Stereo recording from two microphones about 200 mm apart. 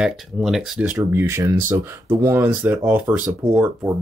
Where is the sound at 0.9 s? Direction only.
15° right (ahead or behind).